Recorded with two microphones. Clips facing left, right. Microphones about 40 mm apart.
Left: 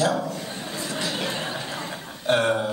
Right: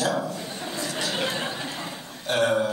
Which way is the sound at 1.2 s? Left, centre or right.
Centre.